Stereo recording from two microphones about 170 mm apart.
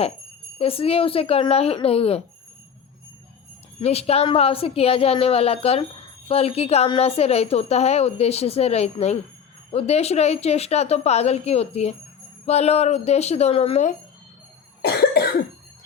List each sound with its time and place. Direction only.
0.6 s a woman's voice: 35° left (ahead or behind)
3.8 s a woman's voice: 35° left (ahead or behind)
14.8 s cough: 65° left (ahead or behind)